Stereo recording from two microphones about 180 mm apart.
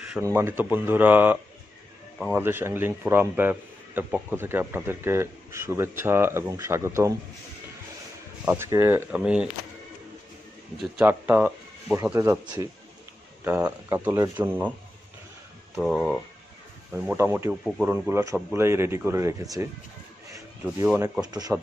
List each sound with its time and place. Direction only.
0.2 s a man's voice: 15° right (ahead or behind)
8.5 s a man's voice: 15° right (ahead or behind)
10.8 s a man's voice: 10° right (ahead or behind)
15.7 s speech: centre (ahead or behind)
17.2 s a man's voice: 15° right (ahead or behind)
21.2 s speech: 20° right (ahead or behind)